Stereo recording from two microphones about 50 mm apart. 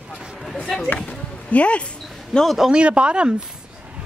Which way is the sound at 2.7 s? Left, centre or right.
Right.